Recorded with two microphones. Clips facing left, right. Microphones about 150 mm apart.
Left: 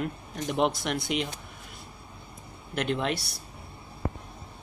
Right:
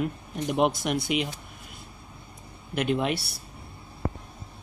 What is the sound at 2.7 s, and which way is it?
Speech, 5° right (ahead or behind).